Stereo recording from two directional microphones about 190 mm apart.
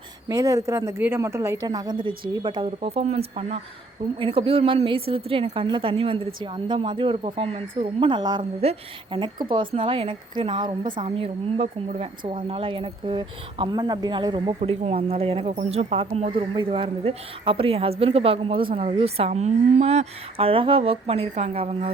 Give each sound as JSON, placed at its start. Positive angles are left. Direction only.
{"t": 0.3, "sound": "a woman's voice", "side_deg": -15}
{"t": 14.6, "sound": "speech", "side_deg": -35}